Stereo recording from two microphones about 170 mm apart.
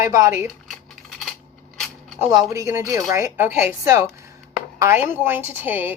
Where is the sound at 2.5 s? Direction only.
20° right (ahead or behind).